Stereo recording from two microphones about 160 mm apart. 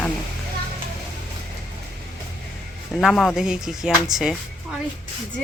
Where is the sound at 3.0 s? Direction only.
Centre (ahead or behind).